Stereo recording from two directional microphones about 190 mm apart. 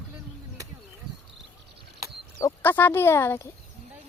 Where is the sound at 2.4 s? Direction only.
15° left (ahead or behind).